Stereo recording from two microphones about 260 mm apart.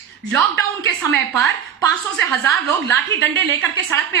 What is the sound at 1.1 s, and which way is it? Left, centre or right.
A woman's voice, right.